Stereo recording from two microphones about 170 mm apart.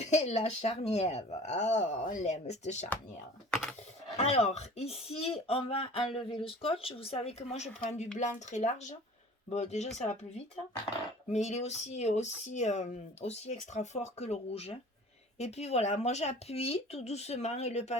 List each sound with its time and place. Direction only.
0.0 s speech: 40° left (ahead or behind)
3.5 s computer keyboard: 5° left (ahead or behind)
4.2 s speech: 40° left (ahead or behind)
11.3 s speech: 40° left (ahead or behind)